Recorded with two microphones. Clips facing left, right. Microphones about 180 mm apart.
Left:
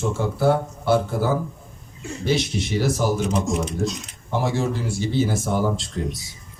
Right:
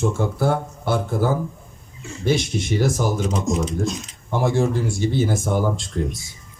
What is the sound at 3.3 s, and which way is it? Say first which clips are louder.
Speech: even; 65° left (ahead or behind).